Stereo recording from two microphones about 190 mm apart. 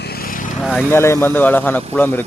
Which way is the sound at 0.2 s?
45° left (ahead or behind).